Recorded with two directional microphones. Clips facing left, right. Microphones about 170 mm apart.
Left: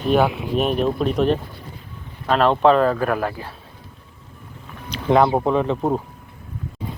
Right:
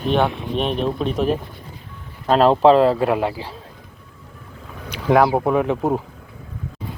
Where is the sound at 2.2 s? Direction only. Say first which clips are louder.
Right 3 dB; 35° right (ahead or behind).